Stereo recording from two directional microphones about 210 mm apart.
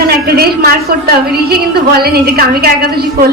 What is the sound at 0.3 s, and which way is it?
A woman's voice, 45° right (ahead or behind).